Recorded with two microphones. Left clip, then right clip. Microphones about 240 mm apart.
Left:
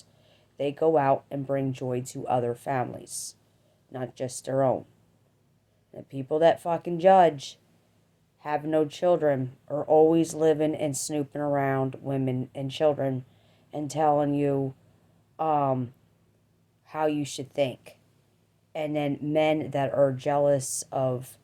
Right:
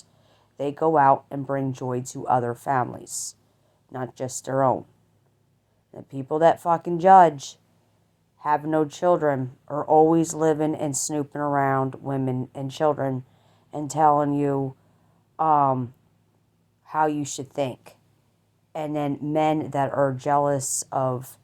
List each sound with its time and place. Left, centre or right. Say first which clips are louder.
0.0 s speech: right 1 dB; right
5.9 s speech: right 1 dB; centre